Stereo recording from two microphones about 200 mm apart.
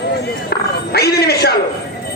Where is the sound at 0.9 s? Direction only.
50° left (ahead or behind).